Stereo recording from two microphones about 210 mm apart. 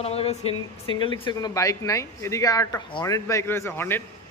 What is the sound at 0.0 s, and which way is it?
Speech, 30° left (ahead or behind).